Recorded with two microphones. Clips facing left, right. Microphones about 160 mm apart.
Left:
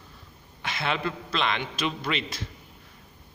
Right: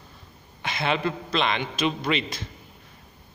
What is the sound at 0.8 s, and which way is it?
A man's voice, centre (ahead or behind).